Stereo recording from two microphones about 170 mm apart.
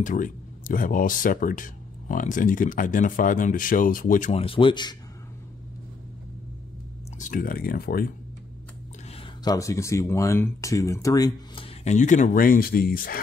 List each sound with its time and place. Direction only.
0.0 s speech: 50° left (ahead or behind)
4.3 s speech: 35° left (ahead or behind)
7.2 s speech: 50° left (ahead or behind)
9.1 s speech: 25° left (ahead or behind)
11.6 s speech: 40° left (ahead or behind); by 13.2 s 60° left (ahead or behind)